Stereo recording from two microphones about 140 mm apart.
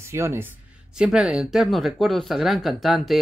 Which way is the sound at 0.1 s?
20° right (ahead or behind).